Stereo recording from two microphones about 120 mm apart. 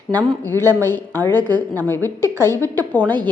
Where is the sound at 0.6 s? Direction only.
20° left (ahead or behind).